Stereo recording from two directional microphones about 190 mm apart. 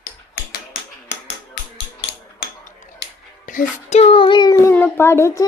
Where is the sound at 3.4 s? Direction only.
45° left (ahead or behind).